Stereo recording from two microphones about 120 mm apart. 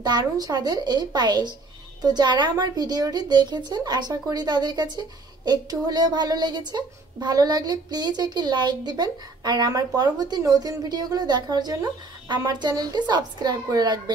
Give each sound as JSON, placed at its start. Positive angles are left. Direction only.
{"t": 0.0, "sound": "a woman's voice", "side_deg": -35}